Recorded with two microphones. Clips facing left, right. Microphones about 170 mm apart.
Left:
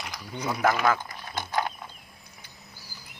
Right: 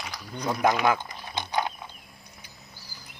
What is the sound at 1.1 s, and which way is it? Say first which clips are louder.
Mechanisms: even; 15° right (ahead or behind).